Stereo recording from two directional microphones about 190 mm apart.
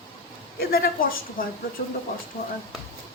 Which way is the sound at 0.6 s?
50° left (ahead or behind).